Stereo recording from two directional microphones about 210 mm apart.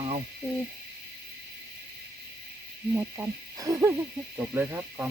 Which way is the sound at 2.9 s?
15° right (ahead or behind).